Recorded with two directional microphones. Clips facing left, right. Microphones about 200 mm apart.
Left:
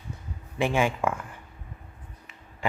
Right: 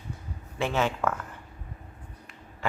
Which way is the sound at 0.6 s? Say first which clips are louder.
Left 2 dB; 15° left (ahead or behind).